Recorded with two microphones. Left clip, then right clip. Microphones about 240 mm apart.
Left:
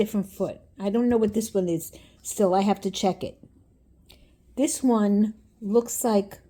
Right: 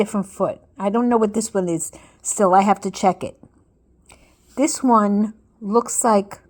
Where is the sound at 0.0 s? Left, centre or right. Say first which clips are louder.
Right 6 dB; centre.